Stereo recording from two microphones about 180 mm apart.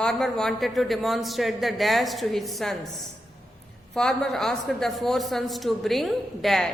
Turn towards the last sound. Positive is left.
turn(degrees=0)  # may be behind; listen again after turning